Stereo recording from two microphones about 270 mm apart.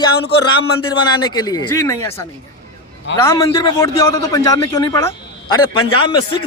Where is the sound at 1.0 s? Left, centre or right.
Centre.